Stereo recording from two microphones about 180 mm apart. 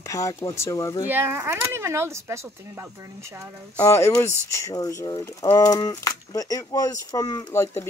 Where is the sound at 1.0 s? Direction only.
10° right (ahead or behind).